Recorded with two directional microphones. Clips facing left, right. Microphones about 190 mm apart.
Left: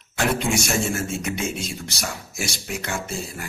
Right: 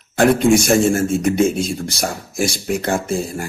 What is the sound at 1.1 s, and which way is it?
Speech, 35° right (ahead or behind).